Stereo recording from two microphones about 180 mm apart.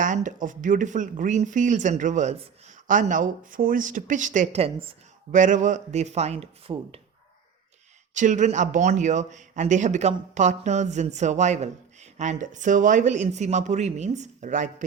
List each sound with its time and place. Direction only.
0.0 s speech: 45° right (ahead or behind)
5.3 s a man's voice: 45° right (ahead or behind)
8.1 s a man's voice: 45° right (ahead or behind)